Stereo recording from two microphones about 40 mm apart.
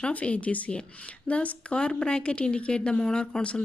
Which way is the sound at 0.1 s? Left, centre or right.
Left.